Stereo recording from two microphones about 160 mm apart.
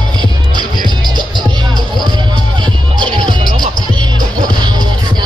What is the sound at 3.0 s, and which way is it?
Music, 25° right (ahead or behind).